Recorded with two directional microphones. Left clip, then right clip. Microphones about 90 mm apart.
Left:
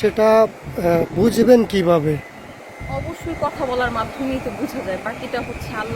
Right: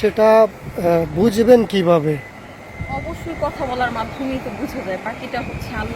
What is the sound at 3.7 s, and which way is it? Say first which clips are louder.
Speech: left 1 dB; 50° left (ahead or behind).